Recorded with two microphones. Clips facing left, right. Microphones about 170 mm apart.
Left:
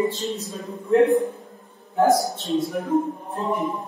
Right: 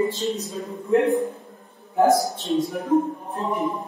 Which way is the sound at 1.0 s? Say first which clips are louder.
Left 2 dB; centre (ahead or behind).